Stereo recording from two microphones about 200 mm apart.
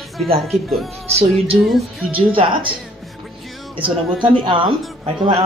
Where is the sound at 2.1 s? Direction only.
25° right (ahead or behind).